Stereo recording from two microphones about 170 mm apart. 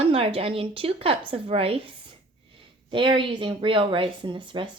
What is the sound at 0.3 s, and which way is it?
Speech, 35° right (ahead or behind).